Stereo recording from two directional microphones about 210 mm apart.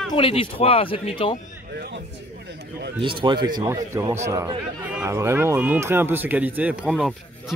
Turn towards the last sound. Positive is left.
turn(degrees=-5)  # may be behind; listen again after turning